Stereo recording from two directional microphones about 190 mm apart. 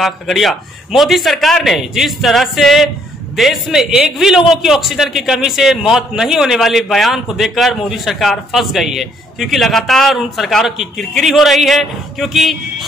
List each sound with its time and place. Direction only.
0.0 s a man's voice: centre (ahead or behind)